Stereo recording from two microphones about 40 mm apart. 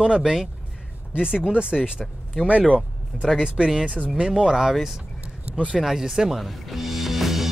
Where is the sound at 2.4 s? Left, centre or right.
Right.